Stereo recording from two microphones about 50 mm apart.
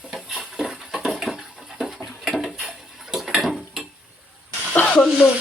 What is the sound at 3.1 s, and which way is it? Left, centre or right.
Tick-tock, centre.